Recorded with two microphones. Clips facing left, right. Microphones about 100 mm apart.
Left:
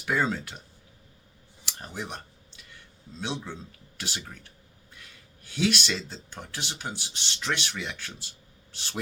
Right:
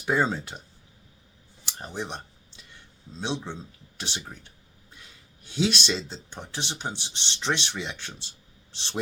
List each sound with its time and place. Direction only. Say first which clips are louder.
0.0 s speech: right 2 dB; 25° right (ahead or behind)
1.6 s clicking: right 3 dB; 25° right (ahead or behind)
3.1 s speech: right 3 dB; 25° right (ahead or behind)